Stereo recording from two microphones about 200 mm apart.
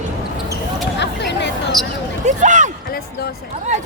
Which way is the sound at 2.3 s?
35° right (ahead or behind).